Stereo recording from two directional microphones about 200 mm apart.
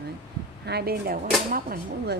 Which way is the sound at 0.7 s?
50° right (ahead or behind).